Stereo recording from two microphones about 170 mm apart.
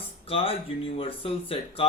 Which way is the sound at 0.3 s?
35° left (ahead or behind).